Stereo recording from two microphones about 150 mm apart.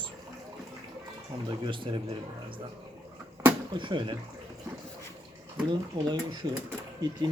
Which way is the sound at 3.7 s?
30° right (ahead or behind).